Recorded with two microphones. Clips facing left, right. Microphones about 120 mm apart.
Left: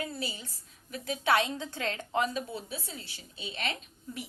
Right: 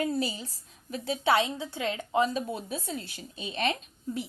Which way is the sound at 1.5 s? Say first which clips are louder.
Right 3 dB; 10° right (ahead or behind).